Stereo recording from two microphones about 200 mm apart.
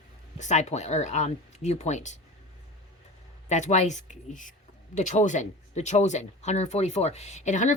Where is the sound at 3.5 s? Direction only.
35° left (ahead or behind).